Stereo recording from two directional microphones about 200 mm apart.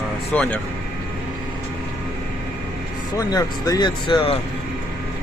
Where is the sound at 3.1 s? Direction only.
20° left (ahead or behind).